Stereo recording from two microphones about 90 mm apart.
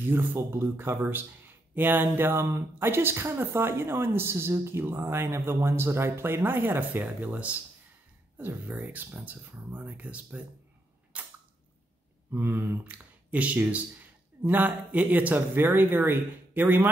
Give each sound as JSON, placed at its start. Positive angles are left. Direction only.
{"t": 0.0, "sound": "speech", "side_deg": -25}
{"t": 11.1, "sound": "cap gun", "side_deg": -15}
{"t": 12.3, "sound": "speech", "side_deg": -25}